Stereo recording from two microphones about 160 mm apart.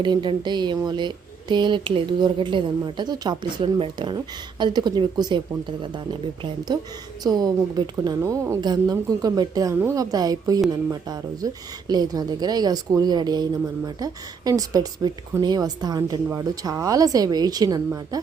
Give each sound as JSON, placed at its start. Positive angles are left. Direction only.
{"t": 0.0, "sound": "a woman's voice", "side_deg": -30}